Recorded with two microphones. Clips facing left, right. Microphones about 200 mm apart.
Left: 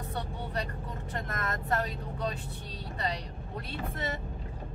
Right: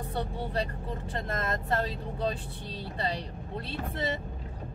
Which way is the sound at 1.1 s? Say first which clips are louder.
Right 3 dB; 25° right (ahead or behind).